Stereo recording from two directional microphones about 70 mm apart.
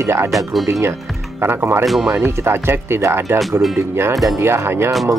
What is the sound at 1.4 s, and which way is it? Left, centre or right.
Speech, right.